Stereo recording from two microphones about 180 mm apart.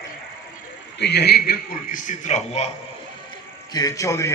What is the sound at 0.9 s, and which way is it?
A man's voice, 65° left (ahead or behind).